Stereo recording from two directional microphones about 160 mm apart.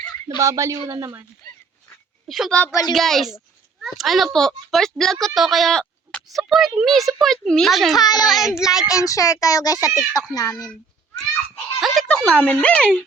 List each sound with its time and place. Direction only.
0.3 s a man's voice: 20° right (ahead or behind)
2.2 s a child's voice: centre (ahead or behind)
7.9 s speech: 25° left (ahead or behind)
8.3 s a child's voice: centre (ahead or behind)
8.9 s speech: 20° left (ahead or behind)
11.8 s speech: 5° left (ahead or behind)